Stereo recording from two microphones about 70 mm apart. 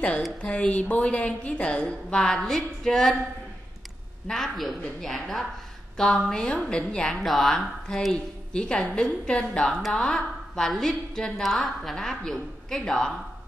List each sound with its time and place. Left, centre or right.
0.5 s a woman's voice: centre
4.3 s a woman's voice: centre